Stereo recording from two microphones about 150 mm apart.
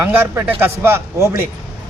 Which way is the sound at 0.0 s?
15° right (ahead or behind).